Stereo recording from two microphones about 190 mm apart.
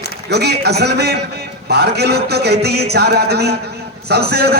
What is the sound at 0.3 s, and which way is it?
A man's voice, 60° right (ahead or behind).